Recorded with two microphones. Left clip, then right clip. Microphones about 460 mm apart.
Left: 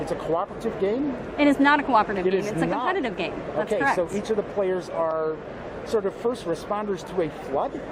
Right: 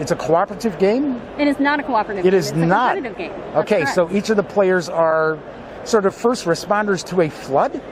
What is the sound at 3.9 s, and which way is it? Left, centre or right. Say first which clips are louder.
Speech: right 7 dB; right.